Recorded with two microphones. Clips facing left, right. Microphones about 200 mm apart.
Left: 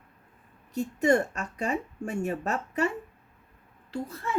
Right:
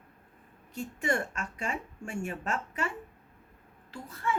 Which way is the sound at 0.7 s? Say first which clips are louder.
Left 8 dB; 40° left (ahead or behind).